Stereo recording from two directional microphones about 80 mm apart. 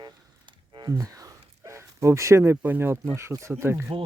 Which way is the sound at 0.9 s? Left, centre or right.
Right.